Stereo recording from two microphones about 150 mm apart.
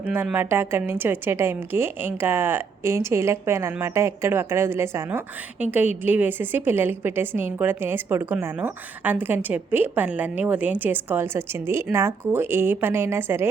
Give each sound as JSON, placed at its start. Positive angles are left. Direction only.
{"t": 0.0, "sound": "a woman's voice", "side_deg": -15}